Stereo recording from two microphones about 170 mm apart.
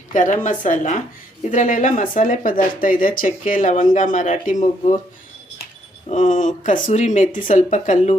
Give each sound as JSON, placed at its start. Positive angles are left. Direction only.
{"t": 0.1, "sound": "a woman's voice", "side_deg": 50}
{"t": 6.1, "sound": "speech", "side_deg": 50}